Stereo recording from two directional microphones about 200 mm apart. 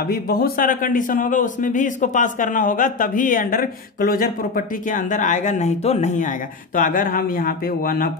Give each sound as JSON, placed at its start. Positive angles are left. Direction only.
{"t": 0.0, "sound": "a man's voice", "side_deg": 50}